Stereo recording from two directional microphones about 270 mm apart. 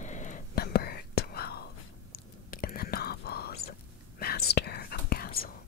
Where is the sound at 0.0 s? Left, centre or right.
Left.